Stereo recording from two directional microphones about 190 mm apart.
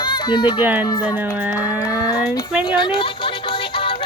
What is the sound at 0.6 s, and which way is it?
Speech, 10° right (ahead or behind).